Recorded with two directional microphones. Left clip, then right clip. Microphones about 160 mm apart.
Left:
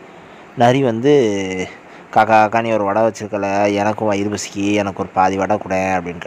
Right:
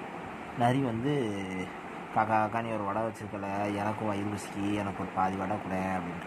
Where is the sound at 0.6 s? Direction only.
60° left (ahead or behind).